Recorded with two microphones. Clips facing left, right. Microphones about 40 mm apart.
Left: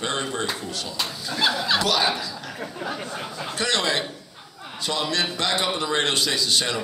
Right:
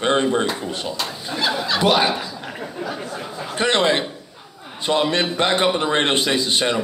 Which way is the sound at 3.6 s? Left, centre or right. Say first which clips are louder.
Right 6 dB; right.